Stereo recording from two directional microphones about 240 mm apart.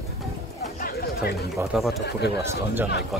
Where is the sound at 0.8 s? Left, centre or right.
Left.